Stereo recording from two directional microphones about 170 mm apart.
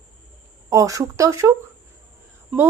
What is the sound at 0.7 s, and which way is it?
A woman's voice, 20° right (ahead or behind).